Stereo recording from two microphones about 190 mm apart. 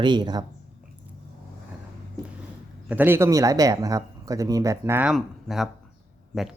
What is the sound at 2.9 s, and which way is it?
Speech, 10° right (ahead or behind).